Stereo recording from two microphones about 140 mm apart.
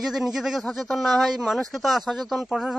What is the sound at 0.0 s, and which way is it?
A man's voice, centre (ahead or behind).